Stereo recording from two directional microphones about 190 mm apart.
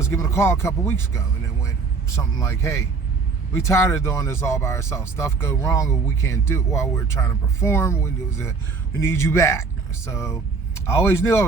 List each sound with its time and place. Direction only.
0.0 s speech: 15° left (ahead or behind)